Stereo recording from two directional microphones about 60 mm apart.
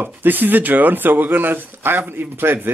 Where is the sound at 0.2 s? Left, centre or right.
Right.